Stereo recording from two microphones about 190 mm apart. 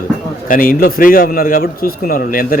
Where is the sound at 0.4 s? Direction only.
45° left (ahead or behind).